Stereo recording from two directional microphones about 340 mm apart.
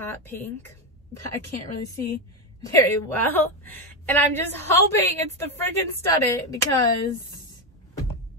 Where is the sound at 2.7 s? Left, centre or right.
Centre.